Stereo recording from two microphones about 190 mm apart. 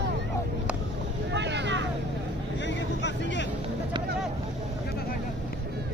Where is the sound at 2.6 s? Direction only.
70° left (ahead or behind).